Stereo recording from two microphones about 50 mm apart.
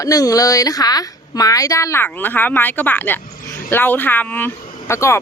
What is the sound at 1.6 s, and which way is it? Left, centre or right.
Speech, left.